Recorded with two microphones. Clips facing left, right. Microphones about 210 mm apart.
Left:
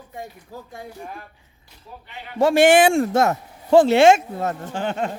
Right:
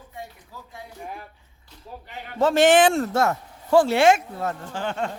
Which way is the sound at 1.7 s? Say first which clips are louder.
Right 4 dB; 10° left (ahead or behind).